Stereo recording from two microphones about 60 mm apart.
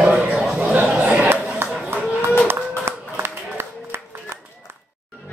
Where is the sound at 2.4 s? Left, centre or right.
Right.